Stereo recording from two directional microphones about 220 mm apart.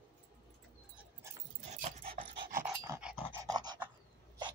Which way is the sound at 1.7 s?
30° right (ahead or behind).